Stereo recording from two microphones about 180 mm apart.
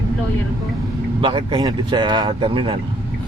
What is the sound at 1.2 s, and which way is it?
Speech, 25° right (ahead or behind).